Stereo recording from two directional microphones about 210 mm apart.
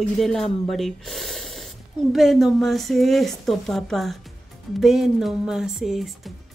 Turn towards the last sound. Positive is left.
turn(degrees=0)  # may be behind; listen again after turning